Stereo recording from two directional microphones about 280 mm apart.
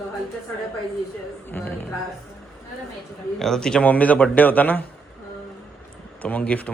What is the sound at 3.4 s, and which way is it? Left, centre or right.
A man's voice, centre.